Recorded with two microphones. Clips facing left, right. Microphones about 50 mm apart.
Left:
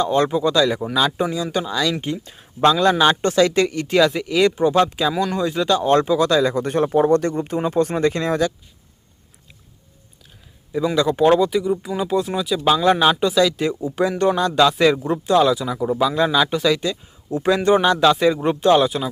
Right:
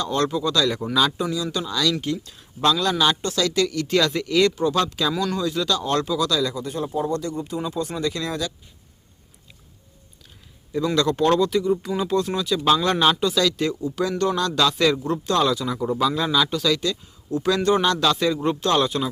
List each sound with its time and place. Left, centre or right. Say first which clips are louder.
0.0 s speech: left 5 dB; left
1.2 s speech: left 4 dB; left; by 4.5 s centre
4.5 s speech: left 5 dB; left
6.6 s speech: left 8 dB; left
10.7 s speech: left 2 dB; centre